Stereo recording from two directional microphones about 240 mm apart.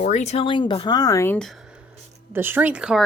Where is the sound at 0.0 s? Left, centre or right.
Left; by 1.5 s centre.